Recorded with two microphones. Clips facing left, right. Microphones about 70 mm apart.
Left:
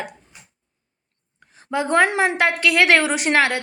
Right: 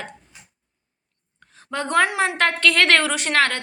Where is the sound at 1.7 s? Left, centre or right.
Centre.